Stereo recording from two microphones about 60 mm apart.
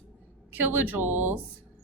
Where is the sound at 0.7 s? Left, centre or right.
Right.